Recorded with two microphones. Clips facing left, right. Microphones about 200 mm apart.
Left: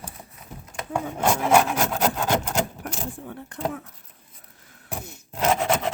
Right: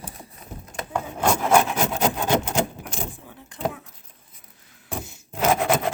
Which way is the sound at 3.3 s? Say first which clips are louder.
Even; 55° left (ahead or behind).